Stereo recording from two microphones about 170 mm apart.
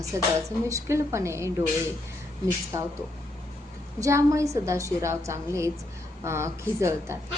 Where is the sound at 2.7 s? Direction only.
15° right (ahead or behind).